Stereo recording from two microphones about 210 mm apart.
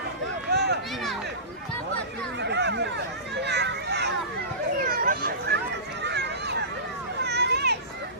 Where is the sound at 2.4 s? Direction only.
55° right (ahead or behind).